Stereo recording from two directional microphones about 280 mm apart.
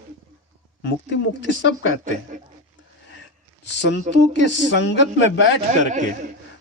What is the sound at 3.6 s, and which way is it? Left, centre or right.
Speech, left.